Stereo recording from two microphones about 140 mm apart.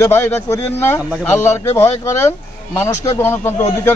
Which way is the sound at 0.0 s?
20° left (ahead or behind).